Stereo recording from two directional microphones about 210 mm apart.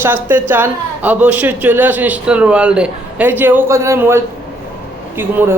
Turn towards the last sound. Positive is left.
turn(degrees=-10)  # may be behind; listen again after turning